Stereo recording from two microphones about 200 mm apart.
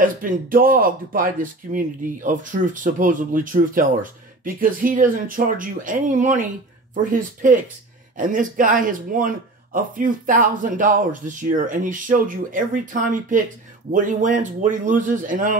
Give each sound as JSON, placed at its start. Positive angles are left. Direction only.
{"t": 0.0, "sound": "speech", "side_deg": -45}